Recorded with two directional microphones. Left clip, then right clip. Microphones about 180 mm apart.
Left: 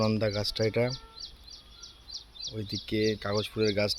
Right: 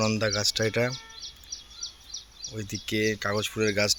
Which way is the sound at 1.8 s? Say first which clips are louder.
Right 11 dB; 10° right (ahead or behind).